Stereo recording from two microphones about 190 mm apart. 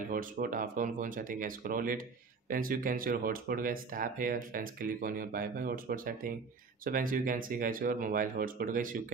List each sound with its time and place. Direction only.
0.1 s speech: 45° right (ahead or behind)